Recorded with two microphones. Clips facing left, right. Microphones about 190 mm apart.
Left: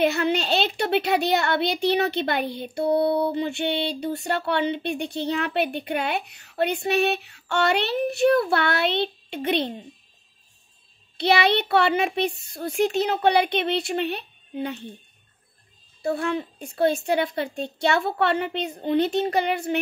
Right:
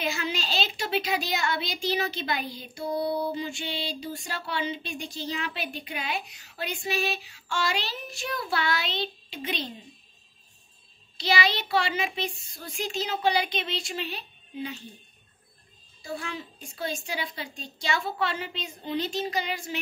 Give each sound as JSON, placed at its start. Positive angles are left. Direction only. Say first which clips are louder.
{"t": 0.0, "sound": "speech", "louder": "left 9 dB", "side_deg": 60}
{"t": 11.1, "sound": "speech", "louder": "left 7 dB", "side_deg": 60}
{"t": 16.0, "sound": "speech", "louder": "left 10 dB", "side_deg": 60}